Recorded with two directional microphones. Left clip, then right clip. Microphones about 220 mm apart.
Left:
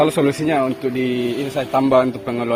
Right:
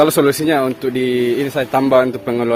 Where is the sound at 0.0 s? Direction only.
50° right (ahead or behind).